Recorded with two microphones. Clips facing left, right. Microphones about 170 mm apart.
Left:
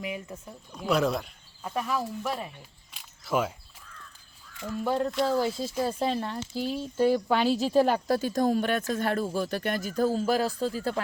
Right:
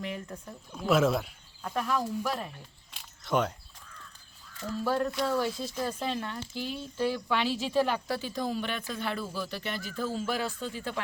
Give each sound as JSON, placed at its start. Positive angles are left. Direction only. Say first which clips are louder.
{"t": 0.0, "sound": "a woman's voice", "louder": "left 2 dB", "side_deg": 5}
{"t": 2.9, "sound": "a sound", "louder": "left 1 dB", "side_deg": 0}
{"t": 4.6, "sound": "speech", "louder": "left 1 dB", "side_deg": 15}
{"t": 5.2, "sound": "speech", "louder": "left 3 dB", "side_deg": 30}